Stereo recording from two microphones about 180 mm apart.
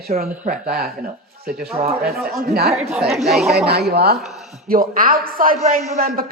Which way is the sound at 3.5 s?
65° right (ahead or behind).